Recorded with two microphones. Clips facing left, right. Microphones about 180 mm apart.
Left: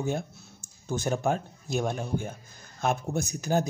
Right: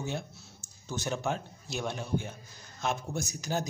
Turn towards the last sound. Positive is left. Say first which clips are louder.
# left 6 dB
turn(degrees=55)  # may be behind; listen again after turning